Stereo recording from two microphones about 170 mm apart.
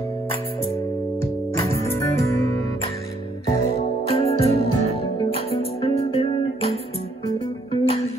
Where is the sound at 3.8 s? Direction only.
35° left (ahead or behind).